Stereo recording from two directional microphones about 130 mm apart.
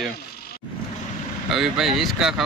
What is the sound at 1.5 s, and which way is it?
Speech, centre (ahead or behind).